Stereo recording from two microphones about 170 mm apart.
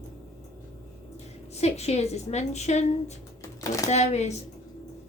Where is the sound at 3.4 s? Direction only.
20° left (ahead or behind).